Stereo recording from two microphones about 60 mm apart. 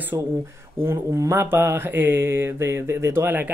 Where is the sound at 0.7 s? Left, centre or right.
Right.